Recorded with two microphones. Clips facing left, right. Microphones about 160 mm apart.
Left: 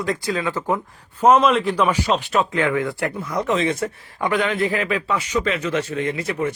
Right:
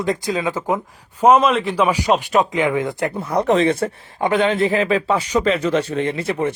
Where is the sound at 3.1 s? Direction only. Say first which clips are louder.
Right 5 dB; 30° right (ahead or behind).